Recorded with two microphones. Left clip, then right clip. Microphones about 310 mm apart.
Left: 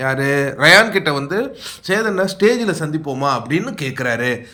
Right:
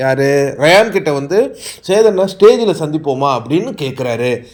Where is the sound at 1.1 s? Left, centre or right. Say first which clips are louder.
Right 7 dB; left.